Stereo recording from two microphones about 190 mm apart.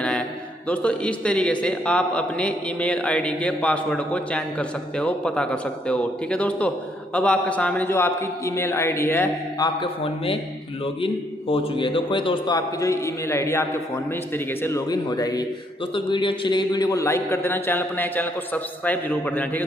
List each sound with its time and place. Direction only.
0.7 s a man's voice: 5° left (ahead or behind)
9.8 s a man's voice: 30° left (ahead or behind); by 19.6 s 10° left (ahead or behind)